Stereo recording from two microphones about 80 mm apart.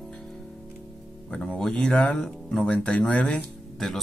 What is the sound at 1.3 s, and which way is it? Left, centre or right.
Speech, centre.